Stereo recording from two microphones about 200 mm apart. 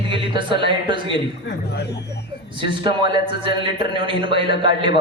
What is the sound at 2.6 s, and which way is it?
A man's voice, 25° right (ahead or behind).